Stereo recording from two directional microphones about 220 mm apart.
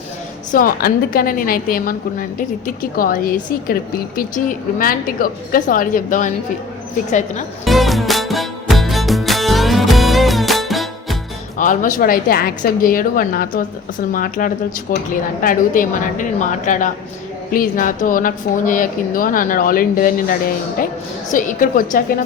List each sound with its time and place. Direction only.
0.5 s speech: 40° left (ahead or behind)
7.6 s music: centre (ahead or behind)
11.5 s speech: 35° left (ahead or behind)
21.3 s speech: 35° left (ahead or behind)